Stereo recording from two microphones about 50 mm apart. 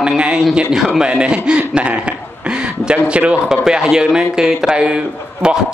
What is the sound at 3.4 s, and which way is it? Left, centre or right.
A man's voice, centre.